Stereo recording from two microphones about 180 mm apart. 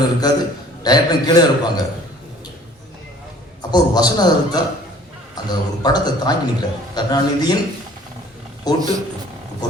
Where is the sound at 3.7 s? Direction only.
20° left (ahead or behind).